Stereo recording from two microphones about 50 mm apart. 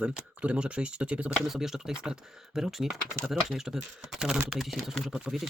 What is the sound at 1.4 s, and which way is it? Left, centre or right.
Speech, centre.